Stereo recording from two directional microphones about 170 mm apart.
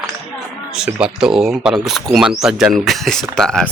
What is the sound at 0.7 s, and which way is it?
Speech, 5° right (ahead or behind).